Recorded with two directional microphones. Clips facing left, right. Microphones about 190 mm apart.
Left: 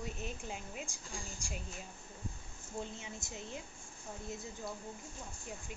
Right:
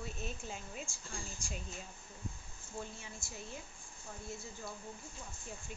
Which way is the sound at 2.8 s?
20° left (ahead or behind).